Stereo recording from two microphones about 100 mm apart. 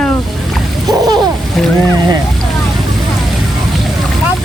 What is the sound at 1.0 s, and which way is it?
Splash, 40° right (ahead or behind).